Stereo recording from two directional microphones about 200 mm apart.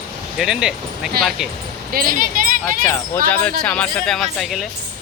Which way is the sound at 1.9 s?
45° right (ahead or behind).